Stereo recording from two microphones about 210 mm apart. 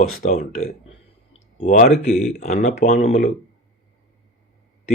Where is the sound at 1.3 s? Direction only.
35° left (ahead or behind).